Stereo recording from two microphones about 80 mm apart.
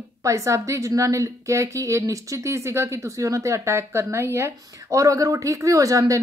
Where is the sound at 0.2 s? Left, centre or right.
Right.